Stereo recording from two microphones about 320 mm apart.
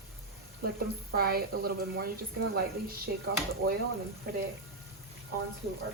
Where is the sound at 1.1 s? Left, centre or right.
Right.